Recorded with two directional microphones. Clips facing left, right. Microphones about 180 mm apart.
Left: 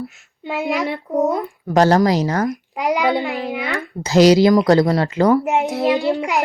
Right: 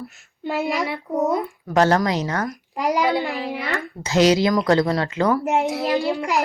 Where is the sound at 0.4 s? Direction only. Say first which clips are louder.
Even; centre (ahead or behind).